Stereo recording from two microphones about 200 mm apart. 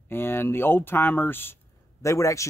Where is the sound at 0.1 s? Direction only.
10° left (ahead or behind).